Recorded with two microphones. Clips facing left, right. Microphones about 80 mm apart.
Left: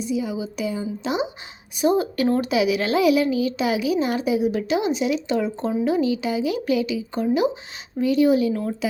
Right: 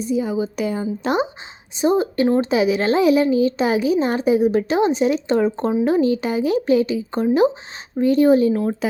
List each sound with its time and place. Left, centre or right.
0.0 s a woman's voice: right
1.7 s a woman's voice: right